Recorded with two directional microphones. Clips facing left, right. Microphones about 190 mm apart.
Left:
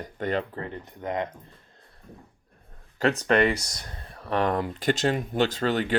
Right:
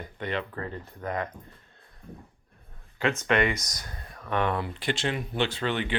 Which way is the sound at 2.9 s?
35° left (ahead or behind).